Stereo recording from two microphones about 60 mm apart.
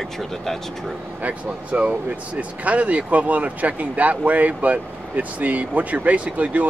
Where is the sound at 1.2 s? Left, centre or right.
Right.